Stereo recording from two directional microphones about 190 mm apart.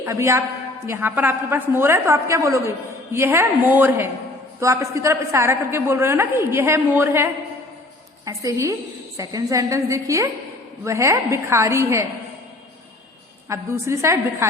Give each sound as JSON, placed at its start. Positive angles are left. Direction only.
{"t": 0.0, "sound": "a woman's voice", "side_deg": -15}
{"t": 13.5, "sound": "a woman's voice", "side_deg": -15}